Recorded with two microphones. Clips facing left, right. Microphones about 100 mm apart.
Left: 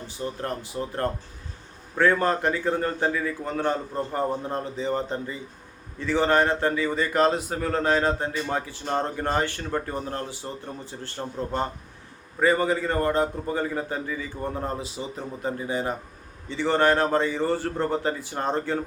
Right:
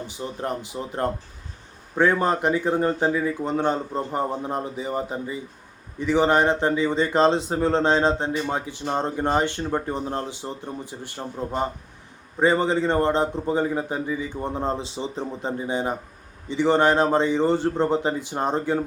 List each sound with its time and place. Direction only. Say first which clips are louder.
0.1 s speech: even; 20° right (ahead or behind)